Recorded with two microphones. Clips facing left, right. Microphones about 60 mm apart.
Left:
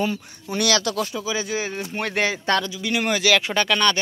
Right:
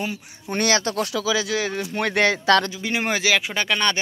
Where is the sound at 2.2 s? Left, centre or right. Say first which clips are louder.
Right 5 dB; right.